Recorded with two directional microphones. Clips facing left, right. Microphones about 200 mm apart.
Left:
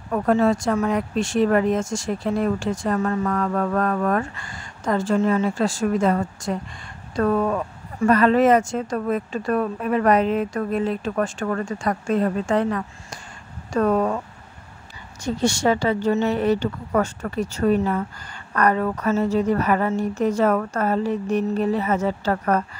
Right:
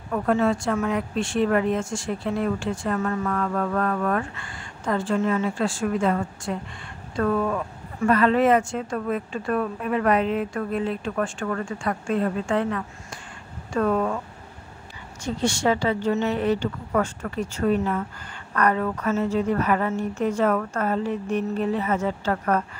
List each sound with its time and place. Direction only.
0.1 s speech: 40° left (ahead or behind)
15.2 s speech: 40° left (ahead or behind)